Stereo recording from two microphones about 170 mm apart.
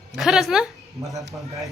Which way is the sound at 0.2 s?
Centre (ahead or behind).